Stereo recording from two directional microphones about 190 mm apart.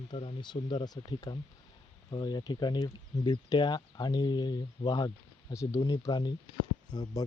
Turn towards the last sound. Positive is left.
turn(degrees=20)  # may be behind; listen again after turning